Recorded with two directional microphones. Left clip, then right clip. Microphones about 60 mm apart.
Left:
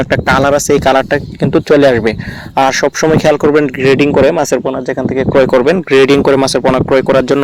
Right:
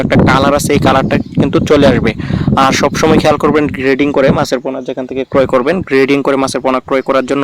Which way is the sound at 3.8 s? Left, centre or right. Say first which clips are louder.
Left 3 dB; left.